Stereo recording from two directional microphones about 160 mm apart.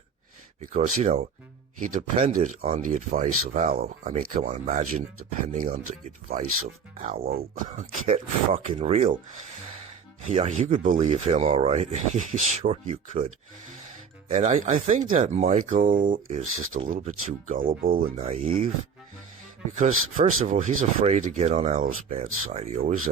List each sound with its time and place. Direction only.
0.6 s speech: 50° right (ahead or behind)
10.2 s speech: 40° right (ahead or behind)
14.3 s speech: 50° right (ahead or behind)
18.2 s speech: 40° right (ahead or behind)
19.8 s speech: 50° right (ahead or behind)